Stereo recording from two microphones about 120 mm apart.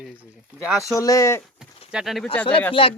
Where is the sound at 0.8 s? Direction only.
25° left (ahead or behind).